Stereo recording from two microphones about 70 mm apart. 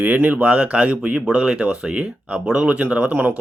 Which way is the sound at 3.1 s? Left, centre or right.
Right.